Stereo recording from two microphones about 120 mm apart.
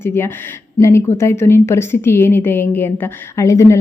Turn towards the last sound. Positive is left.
turn(degrees=25)  # may be behind; listen again after turning